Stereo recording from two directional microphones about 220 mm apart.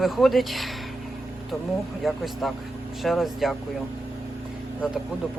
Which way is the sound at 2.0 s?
Centre (ahead or behind).